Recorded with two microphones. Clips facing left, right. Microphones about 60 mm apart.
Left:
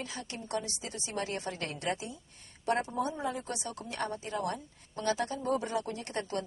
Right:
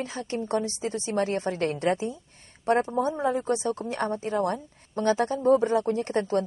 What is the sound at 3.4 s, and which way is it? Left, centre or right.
A woman's voice, right.